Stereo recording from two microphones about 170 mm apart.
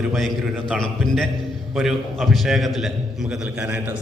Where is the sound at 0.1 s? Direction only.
Centre (ahead or behind).